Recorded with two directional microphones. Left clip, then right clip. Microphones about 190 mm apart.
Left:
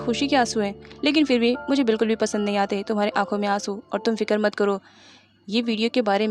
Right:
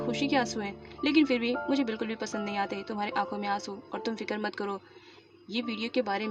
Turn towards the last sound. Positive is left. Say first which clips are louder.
# left 9 dB
turn(degrees=50)  # may be behind; listen again after turning